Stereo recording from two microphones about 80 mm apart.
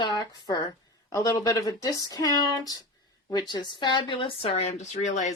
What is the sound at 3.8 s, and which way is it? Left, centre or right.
Speech, left.